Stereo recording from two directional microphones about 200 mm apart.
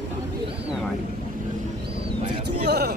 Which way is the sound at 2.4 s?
55° right (ahead or behind).